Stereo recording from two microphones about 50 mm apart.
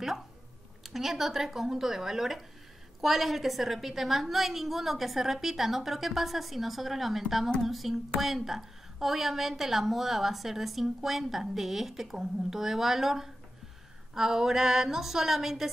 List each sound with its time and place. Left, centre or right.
0.8 s a woman's voice: centre